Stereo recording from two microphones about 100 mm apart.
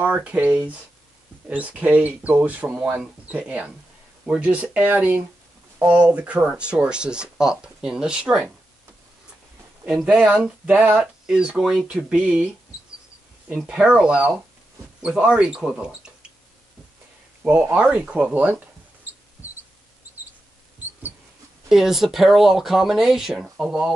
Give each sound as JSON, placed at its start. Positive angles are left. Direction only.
{"t": 0.0, "sound": "speech", "side_deg": -15}
{"t": 9.8, "sound": "speech", "side_deg": -5}
{"t": 13.5, "sound": "speech", "side_deg": -10}
{"t": 17.4, "sound": "speech", "side_deg": -15}
{"t": 19.1, "sound": "a sound", "side_deg": -15}
{"t": 21.6, "sound": "speech", "side_deg": -5}